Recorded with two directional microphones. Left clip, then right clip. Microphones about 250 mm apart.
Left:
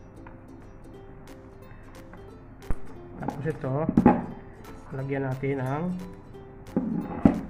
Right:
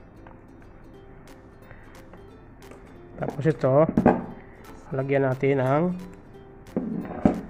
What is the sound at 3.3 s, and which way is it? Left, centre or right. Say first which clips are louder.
Speech: right 12 dB; right.